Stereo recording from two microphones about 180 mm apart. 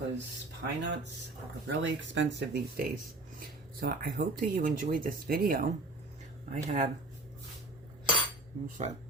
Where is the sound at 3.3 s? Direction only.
55° right (ahead or behind).